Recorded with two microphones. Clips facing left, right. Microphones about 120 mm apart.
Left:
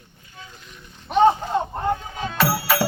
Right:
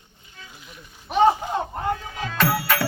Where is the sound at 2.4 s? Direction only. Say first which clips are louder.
Left 1 dB; 30° left (ahead or behind).